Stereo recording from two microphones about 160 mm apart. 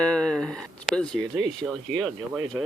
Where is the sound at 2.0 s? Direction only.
Centre (ahead or behind).